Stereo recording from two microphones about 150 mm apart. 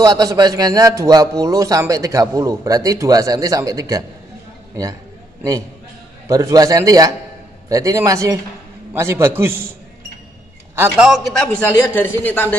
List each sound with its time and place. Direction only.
0.0 s a man's voice: 25° right (ahead or behind)
6.2 s a man's voice: 20° right (ahead or behind)
10.8 s a man's voice: 5° right (ahead or behind); by 12.5 s 10° left (ahead or behind)